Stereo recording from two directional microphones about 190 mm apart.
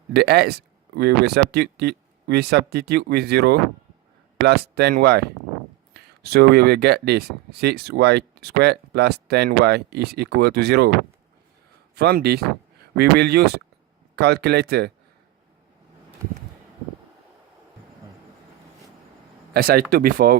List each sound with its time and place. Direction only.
0.1 s speech: 60° right (ahead or behind)
11.9 s speech: 60° right (ahead or behind)
19.5 s speech: 50° right (ahead or behind)